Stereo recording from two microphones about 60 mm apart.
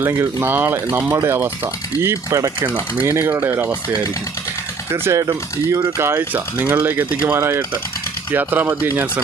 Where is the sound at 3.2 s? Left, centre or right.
Right.